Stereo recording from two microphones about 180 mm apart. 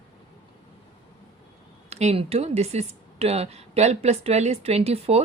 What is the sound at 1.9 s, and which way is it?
Speech, 35° right (ahead or behind).